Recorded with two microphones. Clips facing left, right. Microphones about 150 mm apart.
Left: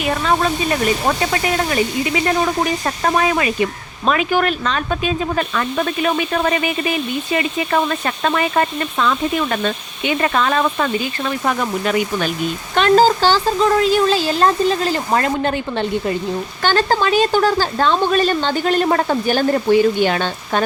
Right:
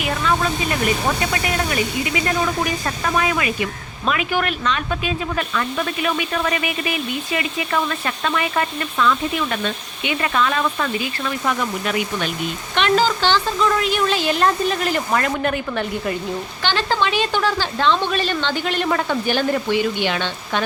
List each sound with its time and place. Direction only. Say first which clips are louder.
0.2 s speech: left 3 dB; 35° left (ahead or behind)
16.6 s a woman's voice: left 4 dB; 45° left (ahead or behind)